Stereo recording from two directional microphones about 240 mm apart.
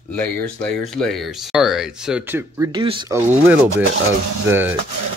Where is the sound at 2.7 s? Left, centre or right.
Centre.